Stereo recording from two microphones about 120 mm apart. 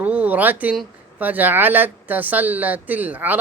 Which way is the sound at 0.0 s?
10° right (ahead or behind).